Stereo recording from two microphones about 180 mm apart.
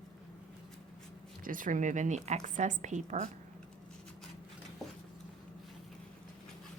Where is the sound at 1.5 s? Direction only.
50° right (ahead or behind).